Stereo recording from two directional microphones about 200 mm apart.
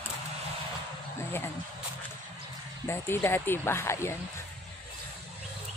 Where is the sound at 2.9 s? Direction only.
10° left (ahead or behind).